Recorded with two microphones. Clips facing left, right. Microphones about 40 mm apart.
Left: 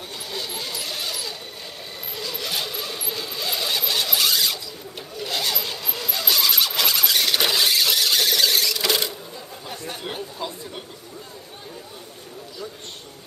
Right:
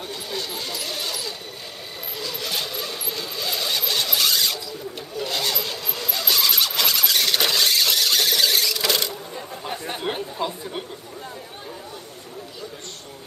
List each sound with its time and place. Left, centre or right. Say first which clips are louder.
0.3 s a sound: even; centre
2.1 s vehicle: even; centre
5.1 s squeal: right 1 dB; centre
9.7 s chatter: right 4 dB; right